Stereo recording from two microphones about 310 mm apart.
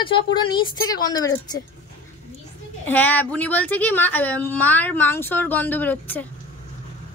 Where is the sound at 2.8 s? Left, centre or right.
Centre.